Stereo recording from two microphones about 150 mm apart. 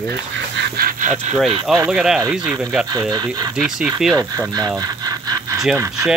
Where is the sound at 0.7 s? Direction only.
70° right (ahead or behind).